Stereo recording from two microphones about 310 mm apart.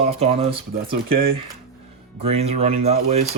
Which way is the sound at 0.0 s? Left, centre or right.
Centre.